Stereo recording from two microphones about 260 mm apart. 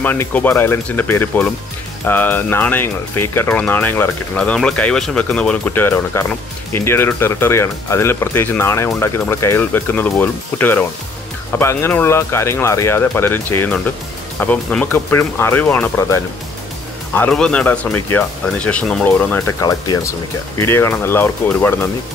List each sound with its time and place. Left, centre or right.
0.0 s speech: centre